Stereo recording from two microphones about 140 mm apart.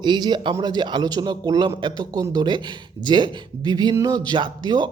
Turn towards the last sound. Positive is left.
turn(degrees=-30)  # may be behind; listen again after turning